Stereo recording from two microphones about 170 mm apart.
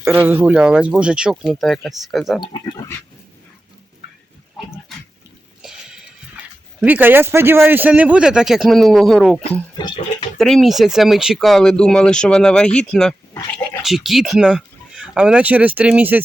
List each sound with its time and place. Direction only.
0.1 s speech: 10° right (ahead or behind)
6.7 s a man's voice: 10° right (ahead or behind)
9.7 s speech: 25° left (ahead or behind)
10.3 s speech: centre (ahead or behind)